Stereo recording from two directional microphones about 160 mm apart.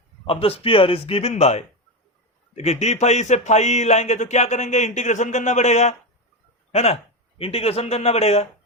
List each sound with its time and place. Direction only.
0.3 s a man's voice: 35° left (ahead or behind)